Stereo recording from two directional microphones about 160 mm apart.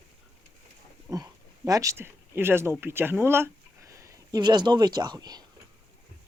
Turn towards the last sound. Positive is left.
turn(degrees=-25)  # may be behind; listen again after turning